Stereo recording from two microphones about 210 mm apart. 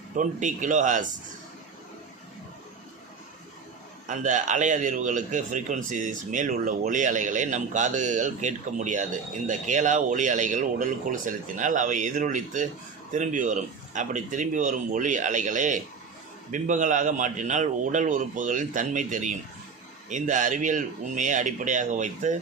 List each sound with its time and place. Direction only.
0.2 s a man's voice: 35° right (ahead or behind)
4.0 s a man's voice: 35° right (ahead or behind)